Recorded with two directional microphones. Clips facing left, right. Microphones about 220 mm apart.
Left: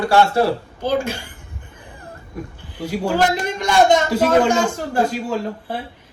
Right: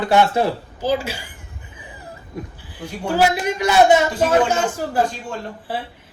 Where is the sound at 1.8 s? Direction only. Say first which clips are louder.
Right 3 dB; 5° right (ahead or behind).